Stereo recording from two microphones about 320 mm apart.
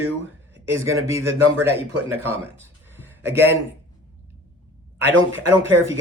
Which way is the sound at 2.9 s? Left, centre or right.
Centre.